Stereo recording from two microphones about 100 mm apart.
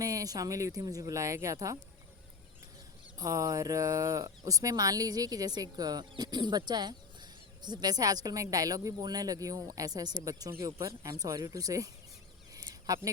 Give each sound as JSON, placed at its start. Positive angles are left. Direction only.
{"t": 0.0, "sound": "speech", "side_deg": -35}
{"t": 3.2, "sound": "speech", "side_deg": -35}
{"t": 12.5, "sound": "a sound", "side_deg": -40}